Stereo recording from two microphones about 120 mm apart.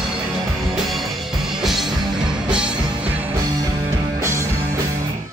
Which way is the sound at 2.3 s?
5° right (ahead or behind).